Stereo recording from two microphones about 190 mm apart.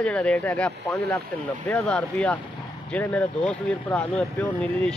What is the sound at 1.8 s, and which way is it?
Speech, 5° left (ahead or behind).